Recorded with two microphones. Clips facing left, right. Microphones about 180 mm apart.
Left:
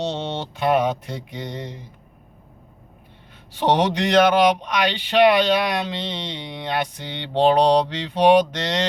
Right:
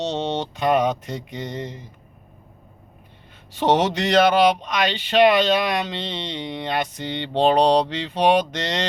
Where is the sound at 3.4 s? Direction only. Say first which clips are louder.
Even; 15° left (ahead or behind).